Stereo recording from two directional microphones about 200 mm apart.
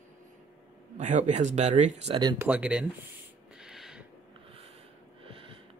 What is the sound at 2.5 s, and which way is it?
Speech, 5° right (ahead or behind).